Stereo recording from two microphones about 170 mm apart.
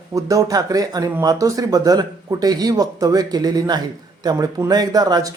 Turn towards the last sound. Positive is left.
turn(degrees=-20)  # may be behind; listen again after turning